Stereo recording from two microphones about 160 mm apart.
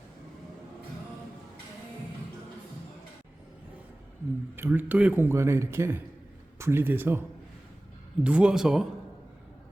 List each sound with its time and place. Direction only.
4.5 s a man's voice: 10° right (ahead or behind)